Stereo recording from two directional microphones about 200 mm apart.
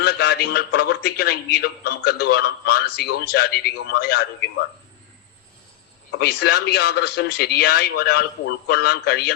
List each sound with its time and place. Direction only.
0.0 s a man's voice: 55° left (ahead or behind)
6.1 s a man's voice: 55° left (ahead or behind)